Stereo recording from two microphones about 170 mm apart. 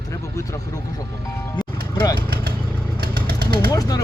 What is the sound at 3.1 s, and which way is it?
Vehicle, 65° right (ahead or behind).